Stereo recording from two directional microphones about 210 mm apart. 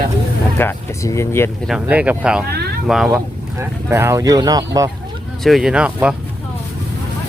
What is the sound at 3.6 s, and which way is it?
Speech, 10° right (ahead or behind).